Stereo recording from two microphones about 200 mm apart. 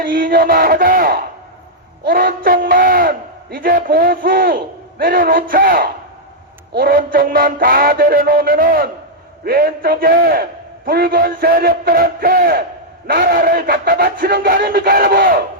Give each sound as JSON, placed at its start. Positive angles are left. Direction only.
{"t": 0.0, "sound": "speech", "side_deg": -45}